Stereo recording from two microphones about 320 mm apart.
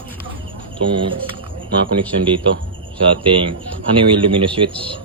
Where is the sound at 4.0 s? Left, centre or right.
Centre.